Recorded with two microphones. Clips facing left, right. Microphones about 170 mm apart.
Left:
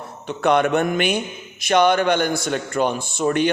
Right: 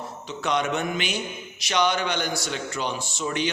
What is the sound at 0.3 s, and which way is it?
A man's voice, 55° left (ahead or behind).